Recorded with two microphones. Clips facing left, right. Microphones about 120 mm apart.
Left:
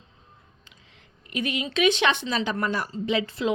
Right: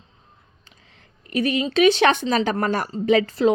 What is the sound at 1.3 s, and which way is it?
A woman's voice, 40° right (ahead or behind).